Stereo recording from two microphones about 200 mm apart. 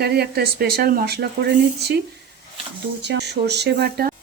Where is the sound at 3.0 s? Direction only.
55° right (ahead or behind).